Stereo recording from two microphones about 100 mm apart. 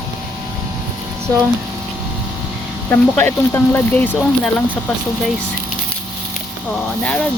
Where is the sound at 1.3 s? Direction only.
15° left (ahead or behind).